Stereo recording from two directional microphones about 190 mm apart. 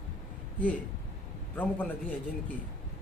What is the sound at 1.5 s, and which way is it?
Speech, 10° left (ahead or behind).